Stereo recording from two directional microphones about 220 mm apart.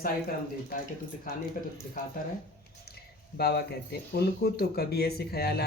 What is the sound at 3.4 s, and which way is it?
Speech, 45° left (ahead or behind).